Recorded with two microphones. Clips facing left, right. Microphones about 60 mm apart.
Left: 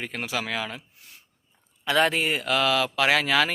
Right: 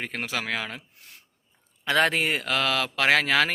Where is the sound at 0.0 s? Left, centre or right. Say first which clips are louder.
Even; right.